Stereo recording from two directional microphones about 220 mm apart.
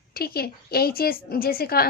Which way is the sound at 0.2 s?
45° left (ahead or behind).